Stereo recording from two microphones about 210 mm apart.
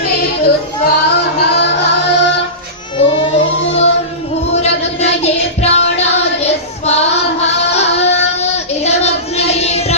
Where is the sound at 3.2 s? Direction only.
30° left (ahead or behind).